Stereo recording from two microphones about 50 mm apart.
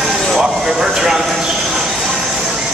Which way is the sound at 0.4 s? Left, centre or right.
Centre.